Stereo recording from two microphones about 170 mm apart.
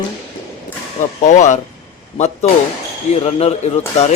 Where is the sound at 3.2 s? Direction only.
40° left (ahead or behind).